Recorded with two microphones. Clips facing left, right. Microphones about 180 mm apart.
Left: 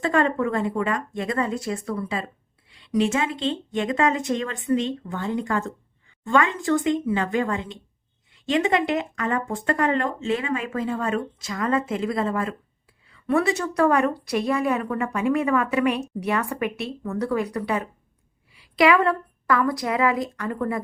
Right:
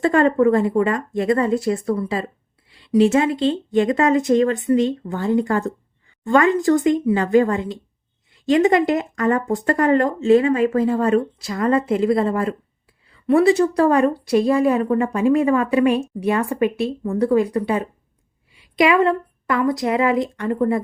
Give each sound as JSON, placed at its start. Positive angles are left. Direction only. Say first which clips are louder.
{"t": 0.0, "sound": "a woman's voice", "louder": "right 7 dB", "side_deg": -40}